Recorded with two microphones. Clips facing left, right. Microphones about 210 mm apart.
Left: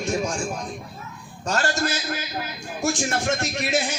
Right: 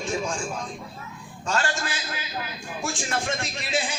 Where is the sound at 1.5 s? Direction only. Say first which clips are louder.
Left 3 dB; 40° left (ahead or behind).